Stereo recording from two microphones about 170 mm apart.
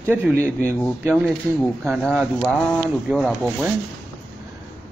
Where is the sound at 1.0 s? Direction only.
5° right (ahead or behind).